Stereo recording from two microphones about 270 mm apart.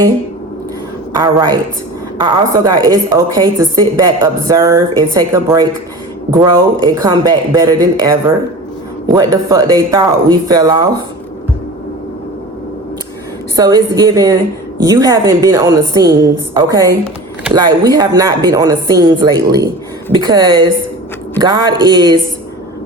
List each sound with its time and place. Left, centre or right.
1.2 s a woman's voice: centre
9.1 s a woman's voice: centre
13.6 s a woman's voice: centre